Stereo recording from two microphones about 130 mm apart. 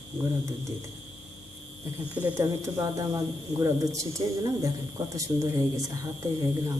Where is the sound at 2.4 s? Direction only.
25° right (ahead or behind).